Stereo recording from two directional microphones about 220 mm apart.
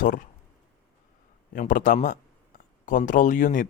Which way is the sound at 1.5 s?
35° left (ahead or behind).